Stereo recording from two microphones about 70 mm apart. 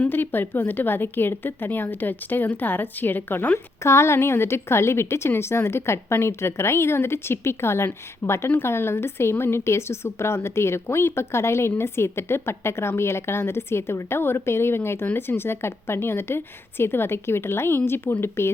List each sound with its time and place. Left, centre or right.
0.0 s a woman's voice: left
3.8 s a woman's voice: left